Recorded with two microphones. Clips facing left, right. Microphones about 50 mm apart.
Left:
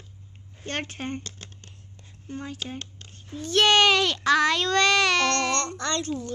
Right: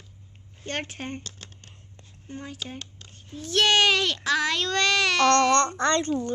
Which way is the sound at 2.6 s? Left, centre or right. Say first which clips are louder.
Left 2 dB; centre.